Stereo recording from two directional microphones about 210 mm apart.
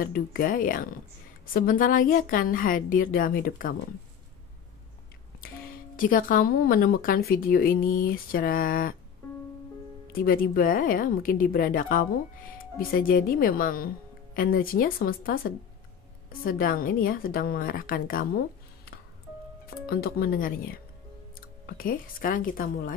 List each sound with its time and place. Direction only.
0.0 s a woman's voice: 45° left (ahead or behind)
5.9 s a woman's voice: 40° left (ahead or behind)
10.1 s a woman's voice: 45° left (ahead or behind)
19.6 s a woman's voice: 45° left (ahead or behind)